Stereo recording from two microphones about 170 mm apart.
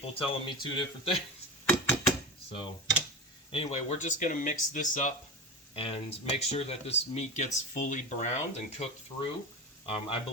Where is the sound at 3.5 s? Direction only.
35° left (ahead or behind).